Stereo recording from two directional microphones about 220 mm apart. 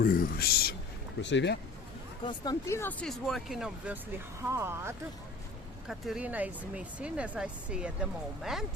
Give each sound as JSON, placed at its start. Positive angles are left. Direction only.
{"t": 0.0, "sound": "speech", "side_deg": 40}
{"t": 2.2, "sound": "speech", "side_deg": 15}